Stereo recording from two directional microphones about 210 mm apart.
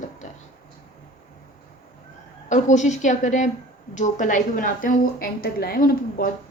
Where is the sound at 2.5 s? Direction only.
35° left (ahead or behind).